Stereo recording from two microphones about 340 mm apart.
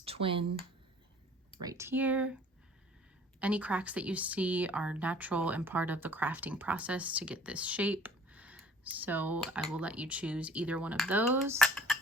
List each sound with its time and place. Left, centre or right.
0.0 s speech: centre
1.6 s speech: centre
3.4 s speech: centre